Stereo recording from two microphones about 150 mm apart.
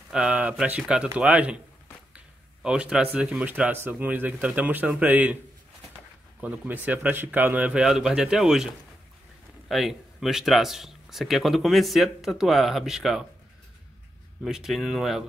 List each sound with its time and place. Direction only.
0.1 s speech: 5° right (ahead or behind)
6.4 s speech: 10° right (ahead or behind)
9.7 s speech: centre (ahead or behind)
14.4 s speech: centre (ahead or behind)